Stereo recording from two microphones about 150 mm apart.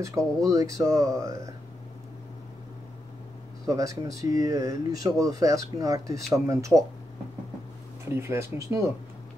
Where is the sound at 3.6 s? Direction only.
20° right (ahead or behind).